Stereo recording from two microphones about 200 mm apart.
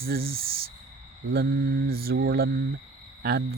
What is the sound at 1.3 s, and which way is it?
Speech, 50° right (ahead or behind).